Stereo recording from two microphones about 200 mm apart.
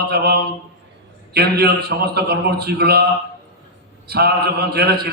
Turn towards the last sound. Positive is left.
turn(degrees=-55)  # may be behind; listen again after turning